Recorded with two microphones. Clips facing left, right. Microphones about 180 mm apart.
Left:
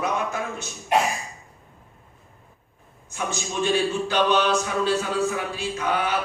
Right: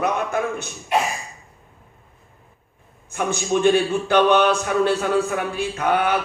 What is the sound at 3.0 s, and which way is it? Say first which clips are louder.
A man's voice: right 7 dB; 55° right (ahead or behind).